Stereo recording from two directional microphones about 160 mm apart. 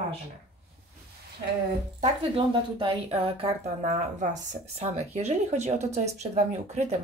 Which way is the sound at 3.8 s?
50° right (ahead or behind).